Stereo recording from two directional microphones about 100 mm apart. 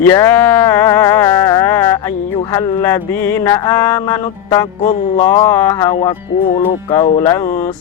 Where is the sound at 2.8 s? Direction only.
25° left (ahead or behind).